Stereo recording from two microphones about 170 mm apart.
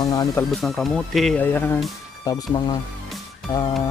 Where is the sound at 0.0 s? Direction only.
20° left (ahead or behind).